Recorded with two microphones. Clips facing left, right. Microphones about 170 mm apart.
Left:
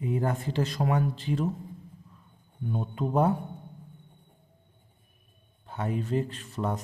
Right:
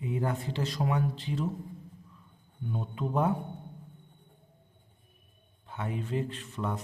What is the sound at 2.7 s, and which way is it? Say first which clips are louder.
Speech: left 4 dB; 45° left (ahead or behind).